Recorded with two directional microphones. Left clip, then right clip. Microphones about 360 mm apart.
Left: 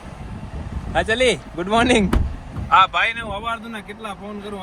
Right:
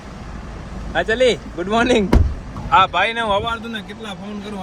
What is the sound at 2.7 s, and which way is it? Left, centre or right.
Speech, centre.